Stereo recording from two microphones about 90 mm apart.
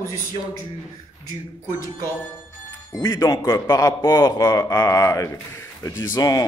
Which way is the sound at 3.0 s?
35° left (ahead or behind).